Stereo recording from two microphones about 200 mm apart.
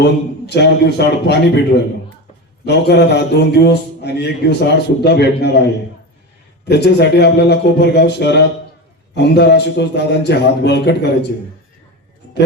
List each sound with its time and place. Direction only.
0.0 s a man's voice: 55° left (ahead or behind)
2.6 s a man's voice: 55° left (ahead or behind)
6.7 s a man's voice: 55° left (ahead or behind)